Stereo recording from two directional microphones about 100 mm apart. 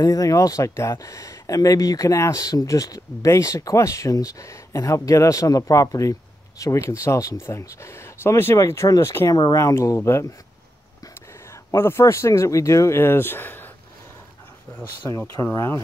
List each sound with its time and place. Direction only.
0.0 s speech: 35° left (ahead or behind)
11.7 s speech: 25° left (ahead or behind)
15.0 s speech: 25° left (ahead or behind)